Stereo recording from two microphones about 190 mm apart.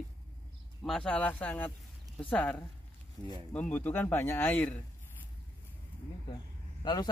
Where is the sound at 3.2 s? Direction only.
15° right (ahead or behind).